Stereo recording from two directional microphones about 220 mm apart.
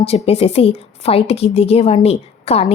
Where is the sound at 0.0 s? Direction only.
25° left (ahead or behind).